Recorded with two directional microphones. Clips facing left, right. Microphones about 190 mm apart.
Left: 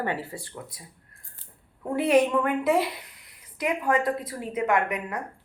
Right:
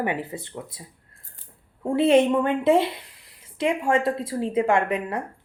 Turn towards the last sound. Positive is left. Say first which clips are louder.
# right 3 dB
turn(degrees=-30)  # may be behind; listen again after turning